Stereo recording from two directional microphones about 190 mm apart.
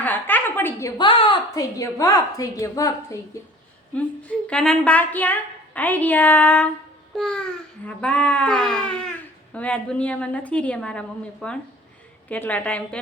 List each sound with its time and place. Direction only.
0.0 s a woman's voice: 10° left (ahead or behind)
3.9 s a woman's voice: 5° left (ahead or behind)